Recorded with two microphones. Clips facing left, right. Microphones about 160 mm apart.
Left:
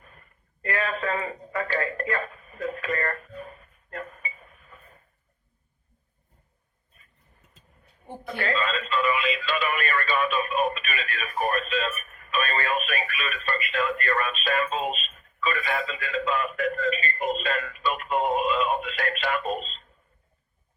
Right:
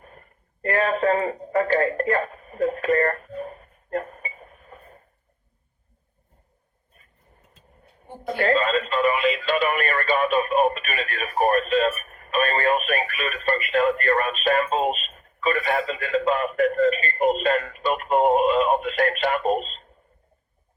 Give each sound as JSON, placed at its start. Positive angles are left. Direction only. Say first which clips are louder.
{"t": 0.0, "sound": "a sound", "louder": "right 6 dB", "side_deg": -45}
{"t": 8.2, "sound": "speech", "louder": "right 8 dB", "side_deg": -30}
{"t": 8.5, "sound": "speech", "louder": "right 5 dB", "side_deg": -45}
{"t": 11.9, "sound": "speech", "louder": "right 6 dB", "side_deg": -35}